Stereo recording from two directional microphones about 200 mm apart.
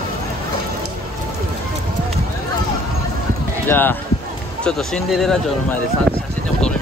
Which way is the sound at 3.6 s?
10° left (ahead or behind).